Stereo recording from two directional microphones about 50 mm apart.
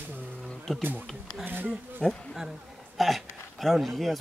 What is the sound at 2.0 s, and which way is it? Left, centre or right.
Speech, centre.